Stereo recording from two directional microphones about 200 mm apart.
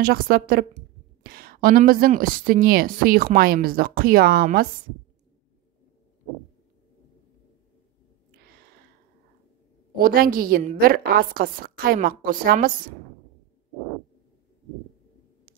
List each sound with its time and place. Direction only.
0.0 s speech: 50° right (ahead or behind)
9.9 s speech: 45° right (ahead or behind)